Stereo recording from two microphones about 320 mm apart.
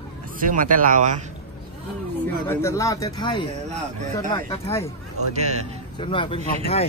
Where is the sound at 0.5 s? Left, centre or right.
Right.